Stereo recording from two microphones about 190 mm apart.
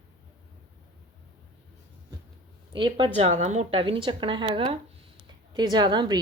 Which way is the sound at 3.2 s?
35° right (ahead or behind).